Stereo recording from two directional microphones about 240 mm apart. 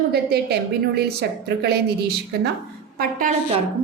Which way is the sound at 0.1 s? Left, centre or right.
Right.